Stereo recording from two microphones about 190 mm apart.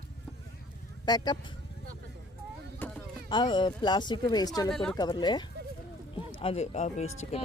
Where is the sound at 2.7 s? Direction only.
10° left (ahead or behind).